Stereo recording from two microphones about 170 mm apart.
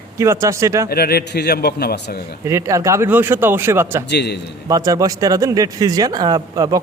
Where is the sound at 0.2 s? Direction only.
15° right (ahead or behind).